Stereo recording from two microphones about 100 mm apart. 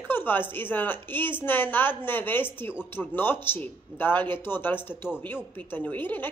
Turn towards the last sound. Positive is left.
turn(degrees=20)  # may be behind; listen again after turning